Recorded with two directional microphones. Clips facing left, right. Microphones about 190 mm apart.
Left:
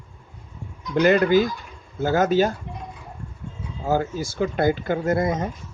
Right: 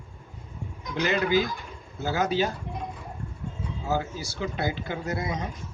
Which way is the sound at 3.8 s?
50° left (ahead or behind).